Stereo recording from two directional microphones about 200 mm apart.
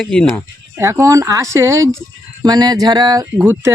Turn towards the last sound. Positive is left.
turn(degrees=-10)  # may be behind; listen again after turning